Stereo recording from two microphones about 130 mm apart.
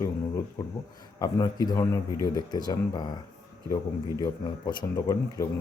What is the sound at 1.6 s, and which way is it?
A man's voice, 25° left (ahead or behind).